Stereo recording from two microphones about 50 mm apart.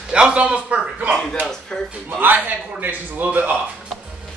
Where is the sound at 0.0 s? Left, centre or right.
Centre.